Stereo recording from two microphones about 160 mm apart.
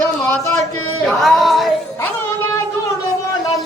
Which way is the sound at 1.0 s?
Centre (ahead or behind).